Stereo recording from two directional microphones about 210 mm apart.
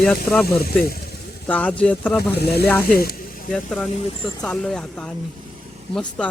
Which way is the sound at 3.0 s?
45° left (ahead or behind).